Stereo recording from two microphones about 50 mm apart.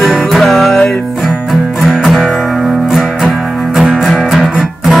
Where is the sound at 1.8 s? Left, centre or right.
Centre.